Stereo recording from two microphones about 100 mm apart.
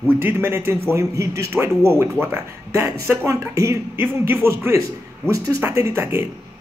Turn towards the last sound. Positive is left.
turn(degrees=-25)  # may be behind; listen again after turning